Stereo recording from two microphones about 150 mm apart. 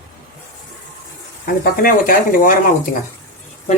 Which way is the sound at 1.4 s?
75° left (ahead or behind).